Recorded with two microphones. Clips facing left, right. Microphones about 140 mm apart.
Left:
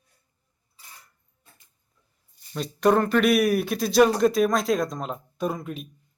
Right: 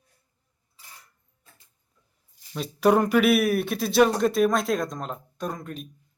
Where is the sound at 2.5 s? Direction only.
5° right (ahead or behind).